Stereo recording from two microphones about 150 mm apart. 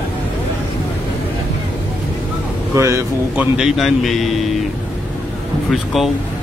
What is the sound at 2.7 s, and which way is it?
Speech, 20° right (ahead or behind).